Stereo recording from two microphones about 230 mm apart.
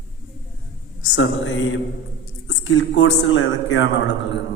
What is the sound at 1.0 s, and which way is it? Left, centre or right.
A man's voice, left.